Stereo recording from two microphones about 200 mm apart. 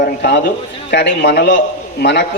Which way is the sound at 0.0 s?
55° left (ahead or behind).